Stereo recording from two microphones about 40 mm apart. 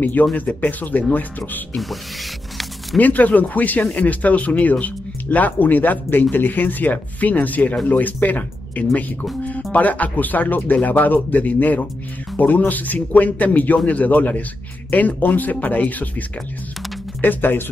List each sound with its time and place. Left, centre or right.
0.0 s speech: left
3.0 s speech: left
17.2 s speech: left